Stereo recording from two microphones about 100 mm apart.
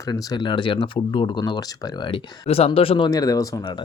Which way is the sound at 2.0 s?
75° left (ahead or behind).